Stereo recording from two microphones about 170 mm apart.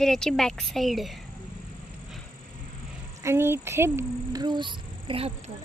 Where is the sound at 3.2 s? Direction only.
15° right (ahead or behind); by 5.5 s 35° right (ahead or behind).